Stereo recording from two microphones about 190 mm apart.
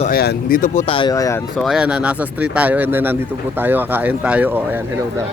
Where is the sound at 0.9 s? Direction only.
25° left (ahead or behind).